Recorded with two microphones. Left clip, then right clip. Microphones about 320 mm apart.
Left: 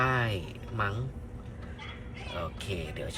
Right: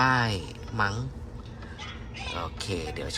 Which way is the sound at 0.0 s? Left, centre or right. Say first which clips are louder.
Right 5 dB; centre.